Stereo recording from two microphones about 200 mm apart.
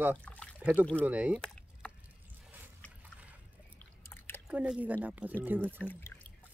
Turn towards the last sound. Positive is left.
turn(degrees=10)  # may be behind; listen again after turning